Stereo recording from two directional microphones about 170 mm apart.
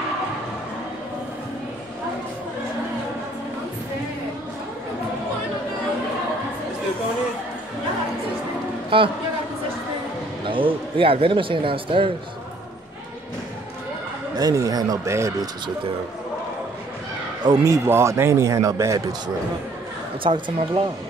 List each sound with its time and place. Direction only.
8.9 s a man's voice: 30° right (ahead or behind)
10.4 s speech: 30° right (ahead or behind)
14.3 s speech: 20° right (ahead or behind)
17.5 s a man's voice: 20° right (ahead or behind)